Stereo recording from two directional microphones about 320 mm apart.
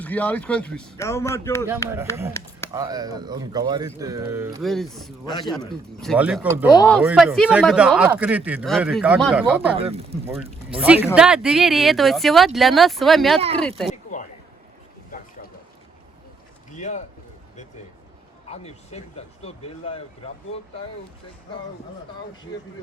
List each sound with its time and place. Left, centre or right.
0.0 s speech: centre
2.7 s speech: centre
6.7 s speech: centre
9.7 s speech: centre
10.8 s speech: centre
13.9 s a sound: left
16.7 s speech: left
18.4 s speech: centre